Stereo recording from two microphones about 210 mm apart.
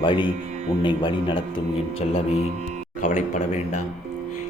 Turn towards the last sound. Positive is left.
turn(degrees=35)  # may be behind; listen again after turning